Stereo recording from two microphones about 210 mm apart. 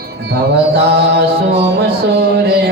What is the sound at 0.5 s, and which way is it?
Mantra, 50° right (ahead or behind).